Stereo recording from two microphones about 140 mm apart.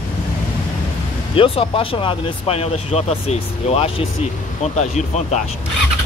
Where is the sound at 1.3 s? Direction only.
40° left (ahead or behind).